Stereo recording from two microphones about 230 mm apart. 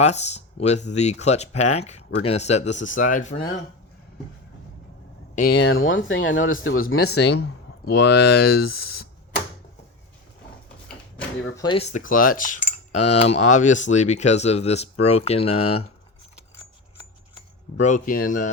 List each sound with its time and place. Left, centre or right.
0.0 s speech: left
2.2 s cutlery: left
5.3 s speech: left
6.9 s speech: left
7.4 s speech: left
11.5 s cutlery: centre
15.0 s speech: left
17.7 s cutlery: left